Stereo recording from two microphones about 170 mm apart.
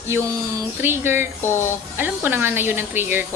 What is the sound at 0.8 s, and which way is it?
Speech, 15° right (ahead or behind).